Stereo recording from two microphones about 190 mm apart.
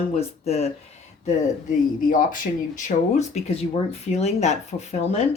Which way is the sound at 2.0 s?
45° left (ahead or behind).